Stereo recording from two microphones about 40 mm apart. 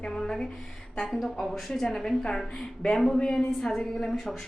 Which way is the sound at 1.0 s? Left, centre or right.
Centre.